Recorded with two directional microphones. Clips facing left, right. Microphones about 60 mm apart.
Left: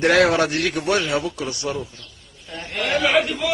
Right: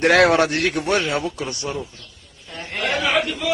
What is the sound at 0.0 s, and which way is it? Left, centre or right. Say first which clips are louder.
Speech: right 2 dB; right.